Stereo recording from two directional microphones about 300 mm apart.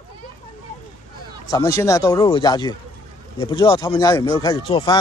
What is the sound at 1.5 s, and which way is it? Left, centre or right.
Speech, centre.